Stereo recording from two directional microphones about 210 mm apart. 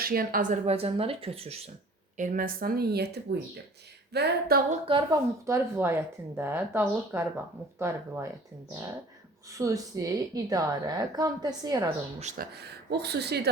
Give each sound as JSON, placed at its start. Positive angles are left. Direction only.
{"t": 0.0, "sound": "speech", "side_deg": -45}
{"t": 0.6, "sound": "speech", "side_deg": -30}
{"t": 2.1, "sound": "speech", "side_deg": -40}
{"t": 5.5, "sound": "a woman's voice", "side_deg": -10}
{"t": 9.5, "sound": "a woman's voice", "side_deg": -15}
{"t": 12.2, "sound": "speech", "side_deg": -45}